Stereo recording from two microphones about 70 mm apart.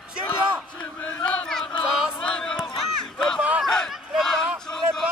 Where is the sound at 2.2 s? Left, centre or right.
Centre.